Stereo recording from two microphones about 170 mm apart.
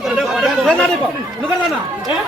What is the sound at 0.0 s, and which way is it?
Chatter, centre (ahead or behind).